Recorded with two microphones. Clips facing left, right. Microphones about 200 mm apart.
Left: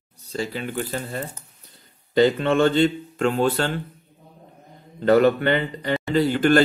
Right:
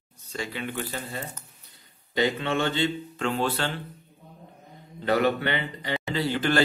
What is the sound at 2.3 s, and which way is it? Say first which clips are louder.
A man's voice: left 8 dB; 50° left (ahead or behind).